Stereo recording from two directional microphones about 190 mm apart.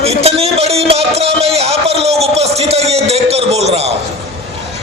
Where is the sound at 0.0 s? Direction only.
30° right (ahead or behind).